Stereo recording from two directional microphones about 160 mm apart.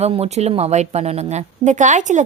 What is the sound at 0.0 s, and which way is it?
A woman's voice, 40° right (ahead or behind).